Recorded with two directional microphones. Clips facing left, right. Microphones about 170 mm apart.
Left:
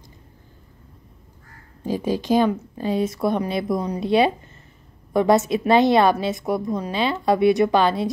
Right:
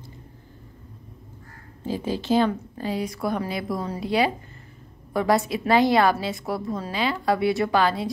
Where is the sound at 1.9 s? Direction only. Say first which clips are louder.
Left 3 dB; 15° left (ahead or behind).